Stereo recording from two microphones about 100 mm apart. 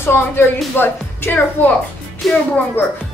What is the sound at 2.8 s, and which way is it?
Speech, 20° left (ahead or behind).